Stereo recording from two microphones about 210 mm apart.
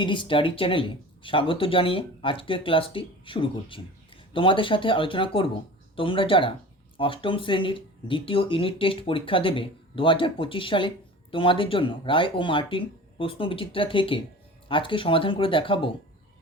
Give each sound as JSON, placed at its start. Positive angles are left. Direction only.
{"t": 0.0, "sound": "speech", "side_deg": 25}